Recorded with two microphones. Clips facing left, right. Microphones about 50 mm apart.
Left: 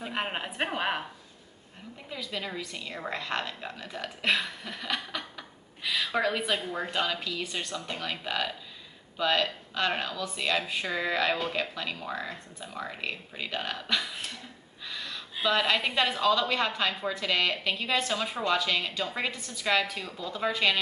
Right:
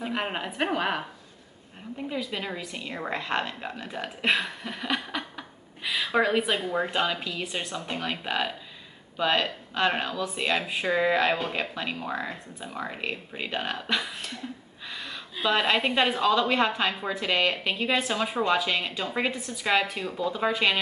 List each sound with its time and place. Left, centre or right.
0.1 s a woman's voice: centre
2.0 s speech: centre
14.9 s a sound: centre
15.4 s speech: centre